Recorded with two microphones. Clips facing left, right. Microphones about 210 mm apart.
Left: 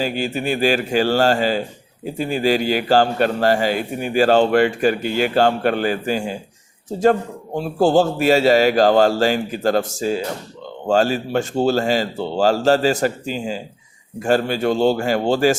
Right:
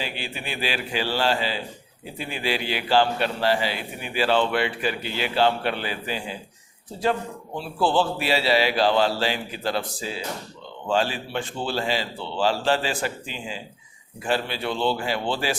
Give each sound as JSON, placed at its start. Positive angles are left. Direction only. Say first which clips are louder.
{"t": 0.0, "sound": "a man's voice", "louder": "left 11 dB", "side_deg": 45}